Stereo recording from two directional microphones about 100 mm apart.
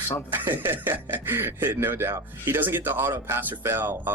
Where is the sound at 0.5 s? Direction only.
20° right (ahead or behind).